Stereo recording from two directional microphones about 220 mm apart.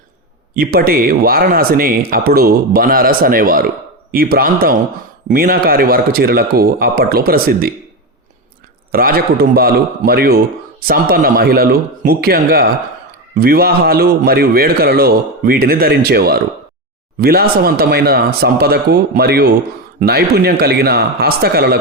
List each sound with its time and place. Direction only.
0.5 s a man's voice: 40° right (ahead or behind)
8.9 s a man's voice: 40° right (ahead or behind)